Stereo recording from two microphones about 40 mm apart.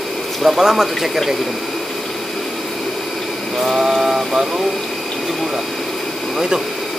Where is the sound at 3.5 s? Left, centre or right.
Centre.